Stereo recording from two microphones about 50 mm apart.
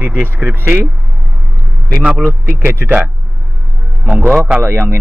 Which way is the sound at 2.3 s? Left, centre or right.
Right.